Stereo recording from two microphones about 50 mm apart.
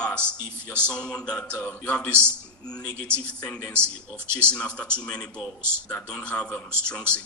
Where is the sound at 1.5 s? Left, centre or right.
Left.